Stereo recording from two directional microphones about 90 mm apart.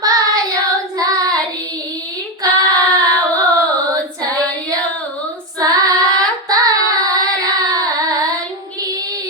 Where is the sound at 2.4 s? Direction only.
45° right (ahead or behind).